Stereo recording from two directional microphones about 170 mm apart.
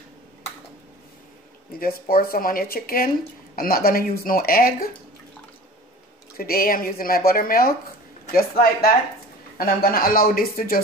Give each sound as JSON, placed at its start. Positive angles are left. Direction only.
{"t": 1.7, "sound": "speech", "side_deg": 60}
{"t": 6.3, "sound": "speech", "side_deg": 60}